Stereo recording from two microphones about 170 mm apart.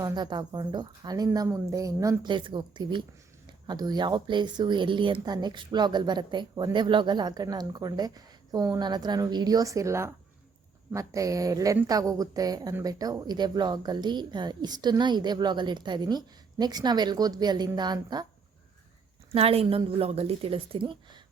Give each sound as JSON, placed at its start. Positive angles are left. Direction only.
{"t": 0.0, "sound": "a woman's voice", "side_deg": -25}
{"t": 19.3, "sound": "speech", "side_deg": -35}